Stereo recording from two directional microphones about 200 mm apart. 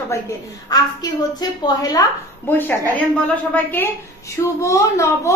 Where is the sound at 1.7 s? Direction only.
20° left (ahead or behind).